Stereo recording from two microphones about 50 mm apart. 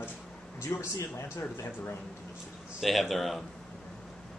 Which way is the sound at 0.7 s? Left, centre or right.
Left.